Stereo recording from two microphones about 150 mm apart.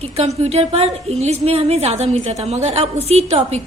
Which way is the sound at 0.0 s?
45° right (ahead or behind).